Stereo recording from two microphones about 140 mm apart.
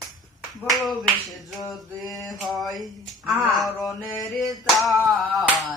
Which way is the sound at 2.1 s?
Centre (ahead or behind).